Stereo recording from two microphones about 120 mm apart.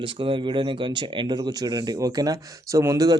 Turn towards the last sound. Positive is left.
turn(degrees=-30)  # may be behind; listen again after turning